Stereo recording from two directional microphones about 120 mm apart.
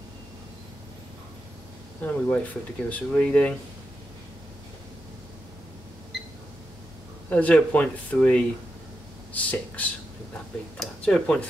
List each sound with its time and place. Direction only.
2.0 s speech: 10° left (ahead or behind)
7.2 s speech: 10° left (ahead or behind)